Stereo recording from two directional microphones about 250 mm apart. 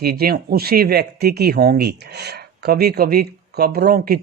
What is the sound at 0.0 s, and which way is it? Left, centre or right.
Speech, right.